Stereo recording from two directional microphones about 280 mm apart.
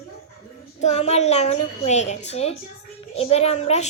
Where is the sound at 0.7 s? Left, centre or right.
Left.